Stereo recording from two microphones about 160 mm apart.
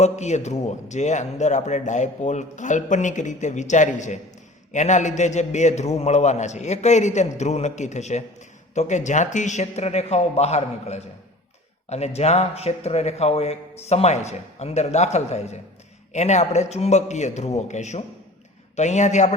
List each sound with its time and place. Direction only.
0.0 s a man's voice: 45° left (ahead or behind)